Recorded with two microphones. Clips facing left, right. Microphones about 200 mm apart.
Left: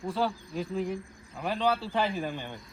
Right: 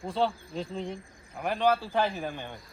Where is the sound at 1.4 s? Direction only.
15° right (ahead or behind).